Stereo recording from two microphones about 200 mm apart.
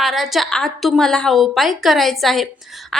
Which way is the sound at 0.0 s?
Centre (ahead or behind).